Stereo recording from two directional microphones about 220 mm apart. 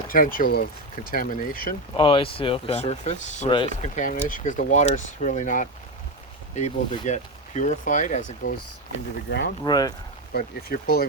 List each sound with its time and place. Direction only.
0.1 s speech: 40° left (ahead or behind)
2.0 s speech: 25° left (ahead or behind)
9.6 s speech: 20° left (ahead or behind)
10.3 s speech: 45° left (ahead or behind)